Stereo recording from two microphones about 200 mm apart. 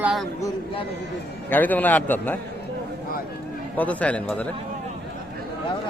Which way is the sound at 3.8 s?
5° left (ahead or behind).